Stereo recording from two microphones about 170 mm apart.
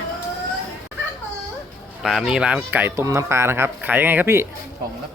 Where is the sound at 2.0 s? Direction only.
5° right (ahead or behind).